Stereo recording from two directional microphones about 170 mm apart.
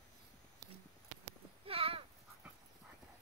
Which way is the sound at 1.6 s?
35° right (ahead or behind).